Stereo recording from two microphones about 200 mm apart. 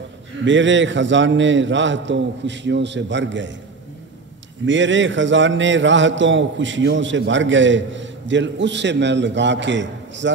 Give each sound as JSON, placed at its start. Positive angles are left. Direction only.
{"t": 0.5, "sound": "a man's voice", "side_deg": -65}
{"t": 4.6, "sound": "a man's voice", "side_deg": -65}